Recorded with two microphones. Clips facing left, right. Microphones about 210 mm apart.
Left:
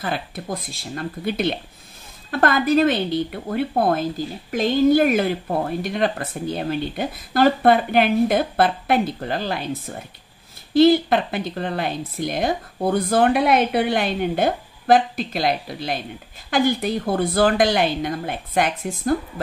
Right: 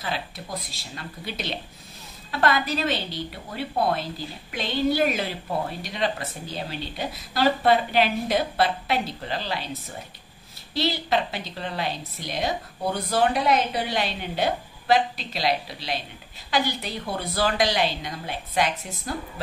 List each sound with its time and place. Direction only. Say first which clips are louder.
0.0 s speech: left 5 dB; 55° left (ahead or behind)